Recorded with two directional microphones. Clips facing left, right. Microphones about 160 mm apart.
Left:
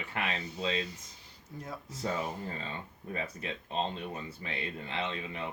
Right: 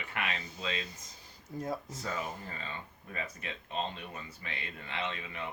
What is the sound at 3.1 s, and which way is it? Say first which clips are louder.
Speech: left 4 dB; 30° left (ahead or behind).